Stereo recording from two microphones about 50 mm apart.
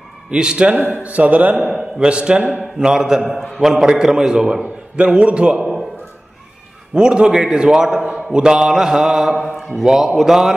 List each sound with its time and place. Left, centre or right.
0.3 s speech: centre
0.8 s a man's voice: right; by 3.3 s centre
3.3 s a man's voice: centre
3.6 s a man's voice: centre
4.9 s speech: right
7.0 s a man's voice: centre